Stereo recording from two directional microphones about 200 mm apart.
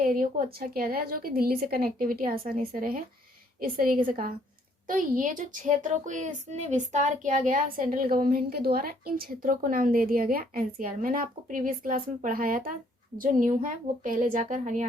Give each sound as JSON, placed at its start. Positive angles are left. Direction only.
{"t": 0.0, "sound": "a woman's voice", "side_deg": -45}